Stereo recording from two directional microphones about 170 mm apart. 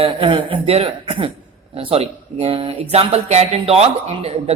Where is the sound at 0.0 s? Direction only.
30° right (ahead or behind).